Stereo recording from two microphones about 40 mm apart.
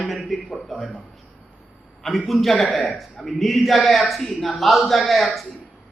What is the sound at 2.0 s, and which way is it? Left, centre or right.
A man's voice, centre.